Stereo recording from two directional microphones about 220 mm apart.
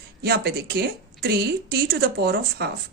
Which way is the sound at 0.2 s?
45° right (ahead or behind).